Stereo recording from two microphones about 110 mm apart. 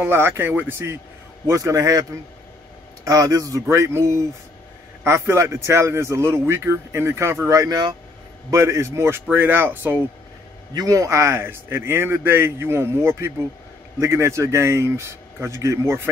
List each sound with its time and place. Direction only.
0.0 s a man's voice: 20° right (ahead or behind)
1.5 s a man's voice: 30° right (ahead or behind)
3.1 s a man's voice: 30° right (ahead or behind)
10.7 s a man's voice: 35° right (ahead or behind)